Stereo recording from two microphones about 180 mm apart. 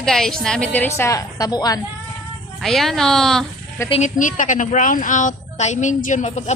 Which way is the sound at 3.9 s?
45° left (ahead or behind).